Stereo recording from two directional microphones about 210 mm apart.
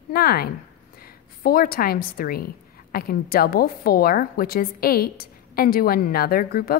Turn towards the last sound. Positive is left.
turn(degrees=45)  # may be behind; listen again after turning